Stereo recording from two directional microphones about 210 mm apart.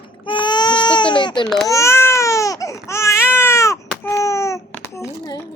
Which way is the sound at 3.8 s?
10° left (ahead or behind).